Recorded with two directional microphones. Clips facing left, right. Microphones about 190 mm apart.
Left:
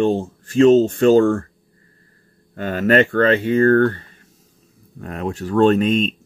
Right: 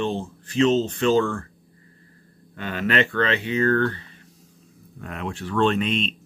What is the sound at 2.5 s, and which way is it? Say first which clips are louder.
Speech: left 8 dB; 45° left (ahead or behind).